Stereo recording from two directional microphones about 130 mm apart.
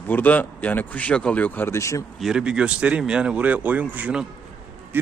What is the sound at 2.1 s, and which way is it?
A man's voice, 5° right (ahead or behind).